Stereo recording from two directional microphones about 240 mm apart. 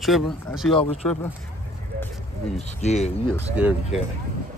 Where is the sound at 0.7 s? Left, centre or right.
Left.